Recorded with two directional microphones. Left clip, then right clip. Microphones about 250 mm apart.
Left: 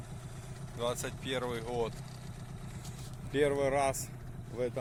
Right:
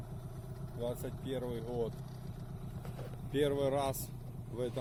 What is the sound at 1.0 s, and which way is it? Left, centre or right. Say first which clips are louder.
Speech: left 4 dB; centre.